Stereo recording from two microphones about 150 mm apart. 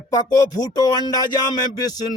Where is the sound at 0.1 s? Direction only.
25° left (ahead or behind).